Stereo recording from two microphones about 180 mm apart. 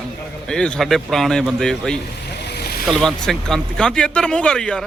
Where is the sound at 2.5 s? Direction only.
60° left (ahead or behind).